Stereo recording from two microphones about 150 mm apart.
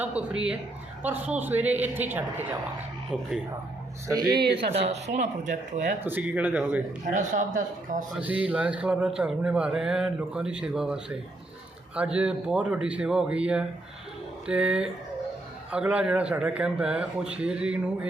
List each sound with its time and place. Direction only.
0.0 s speech: 10° right (ahead or behind)
3.1 s speech: 10° left (ahead or behind)
4.3 s speech: 90° right
4.7 s speech: 45° right (ahead or behind)
6.0 s speech: 15° right (ahead or behind)
7.1 s a man's voice: 60° right (ahead or behind)
8.1 s speech: 10° right (ahead or behind)